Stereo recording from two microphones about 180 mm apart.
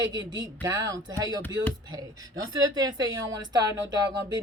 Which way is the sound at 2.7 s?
20° right (ahead or behind).